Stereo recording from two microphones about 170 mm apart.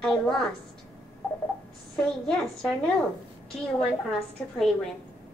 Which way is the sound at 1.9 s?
5° left (ahead or behind).